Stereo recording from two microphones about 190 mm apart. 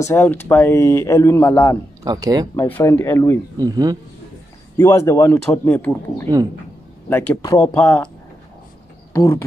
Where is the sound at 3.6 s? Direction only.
20° right (ahead or behind).